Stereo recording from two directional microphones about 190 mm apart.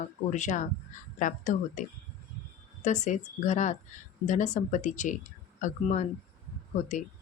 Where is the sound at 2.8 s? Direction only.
40° left (ahead or behind).